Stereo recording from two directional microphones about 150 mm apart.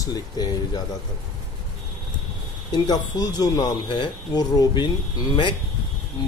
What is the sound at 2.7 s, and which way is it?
Speech, 25° left (ahead or behind).